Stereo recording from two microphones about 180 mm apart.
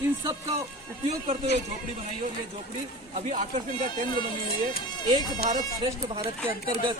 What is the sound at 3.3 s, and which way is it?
Speech, 45° right (ahead or behind).